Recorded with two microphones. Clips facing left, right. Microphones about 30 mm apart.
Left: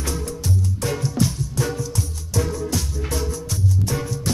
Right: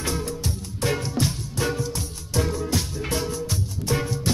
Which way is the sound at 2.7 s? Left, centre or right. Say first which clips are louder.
Even; right.